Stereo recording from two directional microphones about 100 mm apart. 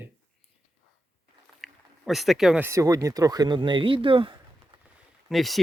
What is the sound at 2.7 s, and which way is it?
Speech, 35° right (ahead or behind).